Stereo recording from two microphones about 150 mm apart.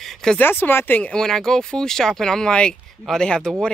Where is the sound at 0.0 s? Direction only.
5° left (ahead or behind).